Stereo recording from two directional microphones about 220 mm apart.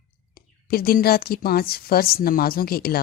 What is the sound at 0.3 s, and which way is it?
Speech, 45° left (ahead or behind).